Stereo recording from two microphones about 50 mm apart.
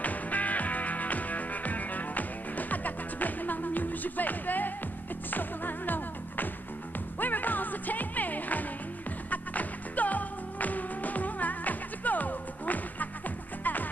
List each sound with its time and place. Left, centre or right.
0.0 s music: left